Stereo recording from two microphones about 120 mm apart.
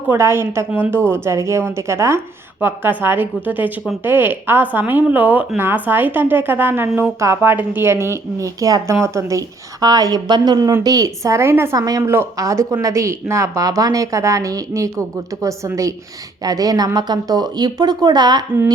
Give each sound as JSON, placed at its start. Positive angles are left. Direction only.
{"t": 0.1, "sound": "a woman's voice", "side_deg": -20}